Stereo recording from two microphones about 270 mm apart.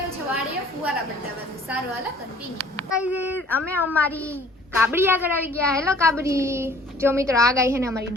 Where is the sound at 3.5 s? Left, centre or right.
Centre.